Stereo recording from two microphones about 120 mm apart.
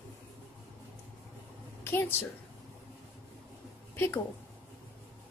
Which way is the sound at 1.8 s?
20° left (ahead or behind).